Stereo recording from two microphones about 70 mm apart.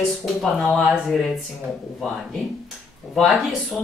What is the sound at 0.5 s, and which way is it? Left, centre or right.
Speech, centre.